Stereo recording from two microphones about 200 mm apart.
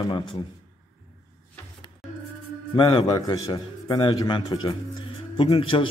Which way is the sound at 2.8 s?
20° left (ahead or behind).